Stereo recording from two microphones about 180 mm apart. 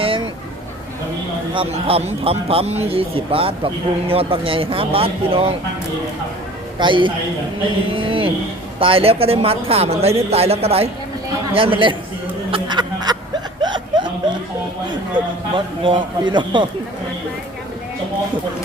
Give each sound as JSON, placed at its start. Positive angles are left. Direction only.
{"t": 1.5, "sound": "a man's voice", "side_deg": -35}
{"t": 6.7, "sound": "a man's voice", "side_deg": -25}
{"t": 12.5, "sound": "a sound", "side_deg": -25}
{"t": 13.6, "sound": "chuckle", "side_deg": -25}
{"t": 15.1, "sound": "a man's voice", "side_deg": -25}